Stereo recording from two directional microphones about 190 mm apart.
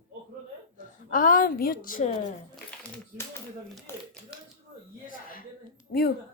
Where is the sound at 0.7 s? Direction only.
45° left (ahead or behind).